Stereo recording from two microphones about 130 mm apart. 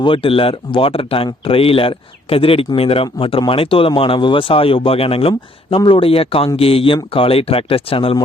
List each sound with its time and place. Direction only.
0.0 s speech: 45° left (ahead or behind)